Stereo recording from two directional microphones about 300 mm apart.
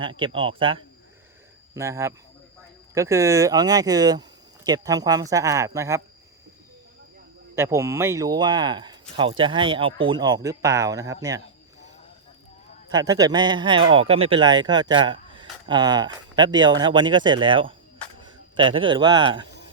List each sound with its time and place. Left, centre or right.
0.0 s a man's voice: centre
7.5 s a man's voice: centre
12.9 s a man's voice: centre